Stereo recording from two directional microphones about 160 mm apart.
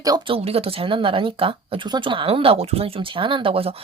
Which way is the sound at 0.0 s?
25° right (ahead or behind).